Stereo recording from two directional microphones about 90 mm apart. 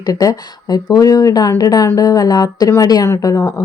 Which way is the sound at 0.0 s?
40° left (ahead or behind).